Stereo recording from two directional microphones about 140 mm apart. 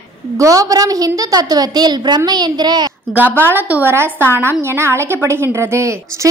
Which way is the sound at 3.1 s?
15° right (ahead or behind).